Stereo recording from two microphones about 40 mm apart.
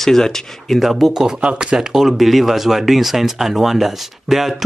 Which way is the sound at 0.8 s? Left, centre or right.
Centre.